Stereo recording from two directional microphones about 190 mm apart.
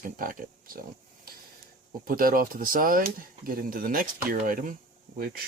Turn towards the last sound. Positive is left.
turn(degrees=-50)  # may be behind; listen again after turning